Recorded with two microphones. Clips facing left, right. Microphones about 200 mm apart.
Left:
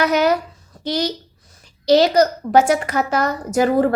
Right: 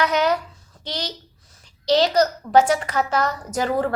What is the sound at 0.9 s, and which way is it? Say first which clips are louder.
A woman's voice: left 9 dB; 10° left (ahead or behind).